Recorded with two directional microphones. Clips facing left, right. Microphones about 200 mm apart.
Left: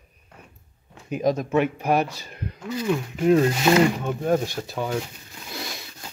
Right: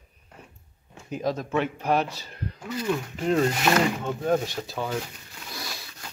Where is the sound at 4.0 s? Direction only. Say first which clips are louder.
Left 2 dB; 10° left (ahead or behind).